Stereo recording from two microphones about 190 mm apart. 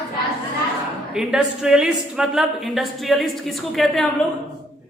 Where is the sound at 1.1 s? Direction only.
5° right (ahead or behind).